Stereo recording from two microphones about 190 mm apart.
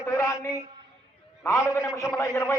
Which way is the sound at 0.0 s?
15° left (ahead or behind).